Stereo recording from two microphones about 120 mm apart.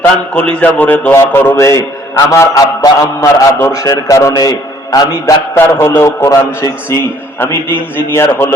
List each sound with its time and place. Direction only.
0.3 s a man's voice: 10° left (ahead or behind); by 5.3 s 30° left (ahead or behind)
5.5 s a man's voice: 20° left (ahead or behind)